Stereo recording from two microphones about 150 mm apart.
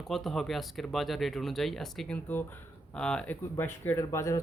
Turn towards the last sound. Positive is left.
turn(degrees=20)  # may be behind; listen again after turning